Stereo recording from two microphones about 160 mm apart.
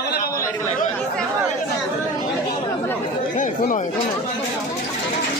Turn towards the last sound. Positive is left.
turn(degrees=55)  # may be behind; listen again after turning